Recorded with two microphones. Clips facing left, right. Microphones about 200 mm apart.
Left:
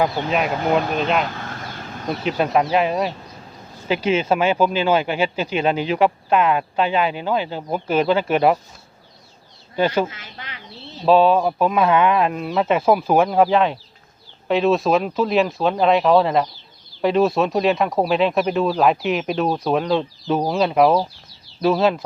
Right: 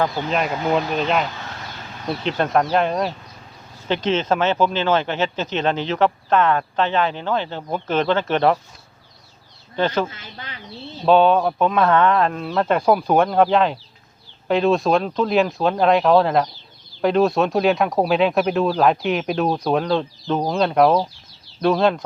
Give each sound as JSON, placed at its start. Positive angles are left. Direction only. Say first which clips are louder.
{"t": 0.0, "sound": "speech", "louder": "left 1 dB", "side_deg": 5}
{"t": 9.7, "sound": "speech", "louder": "left 2 dB", "side_deg": 10}
{"t": 10.1, "sound": "speech", "louder": "right 1 dB", "side_deg": -30}
{"t": 11.0, "sound": "speech", "louder": "even", "side_deg": 0}